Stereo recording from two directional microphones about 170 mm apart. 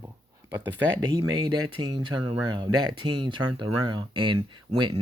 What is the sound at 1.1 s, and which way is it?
Speech, 25° right (ahead or behind).